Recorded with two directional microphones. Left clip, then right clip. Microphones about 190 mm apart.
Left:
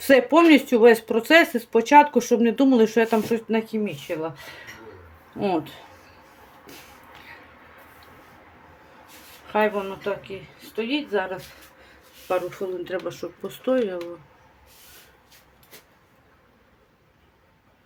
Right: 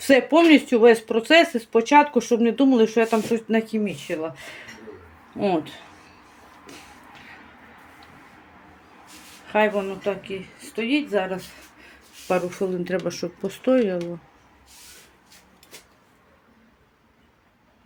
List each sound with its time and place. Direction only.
0.0 s speech: centre (ahead or behind)
3.5 s speech: 15° right (ahead or behind)
5.4 s speech: centre (ahead or behind)
9.5 s a woman's voice: 15° right (ahead or behind)
12.3 s speech: 40° right (ahead or behind)